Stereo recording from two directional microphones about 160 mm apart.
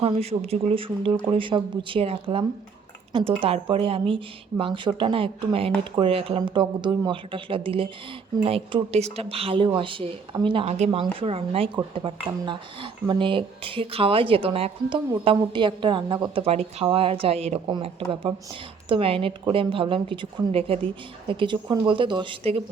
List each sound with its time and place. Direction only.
0.0 s a woman's voice: 40° right (ahead or behind)